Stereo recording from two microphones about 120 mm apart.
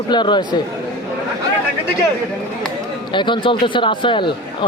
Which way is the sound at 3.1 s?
40° left (ahead or behind).